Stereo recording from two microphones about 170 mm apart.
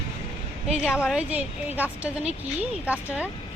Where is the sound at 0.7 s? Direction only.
5° right (ahead or behind).